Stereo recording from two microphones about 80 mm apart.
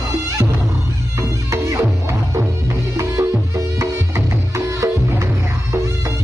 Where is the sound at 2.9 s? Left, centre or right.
Right.